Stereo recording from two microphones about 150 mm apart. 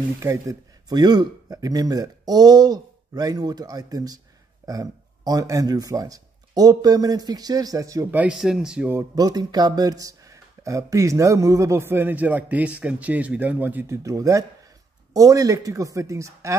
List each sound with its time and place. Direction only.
0.2 s speech: 20° right (ahead or behind)
8.2 s speech: 5° right (ahead or behind); by 16.5 s 20° right (ahead or behind)